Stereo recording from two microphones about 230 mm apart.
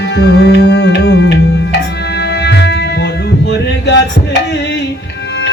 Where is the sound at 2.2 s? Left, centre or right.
Left.